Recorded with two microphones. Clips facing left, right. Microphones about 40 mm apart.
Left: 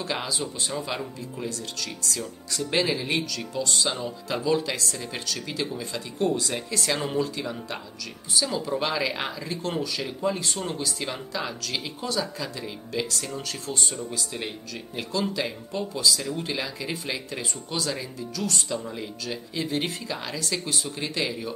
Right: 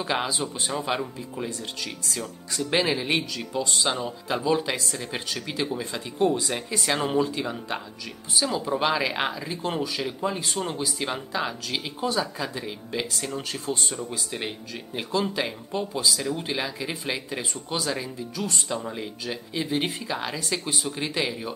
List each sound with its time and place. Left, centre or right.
0.0 s speech: right